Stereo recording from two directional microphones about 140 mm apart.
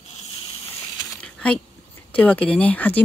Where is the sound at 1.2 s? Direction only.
10° left (ahead or behind).